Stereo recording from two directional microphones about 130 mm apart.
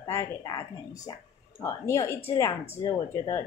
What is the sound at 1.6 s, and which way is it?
Speech, 20° left (ahead or behind).